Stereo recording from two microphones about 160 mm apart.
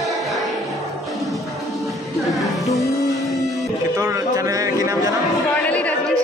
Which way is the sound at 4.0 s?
20° right (ahead or behind).